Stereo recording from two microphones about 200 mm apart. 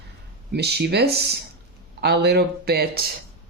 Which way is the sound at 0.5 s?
55° right (ahead or behind).